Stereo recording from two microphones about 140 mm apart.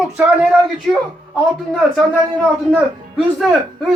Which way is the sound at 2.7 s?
Centre (ahead or behind).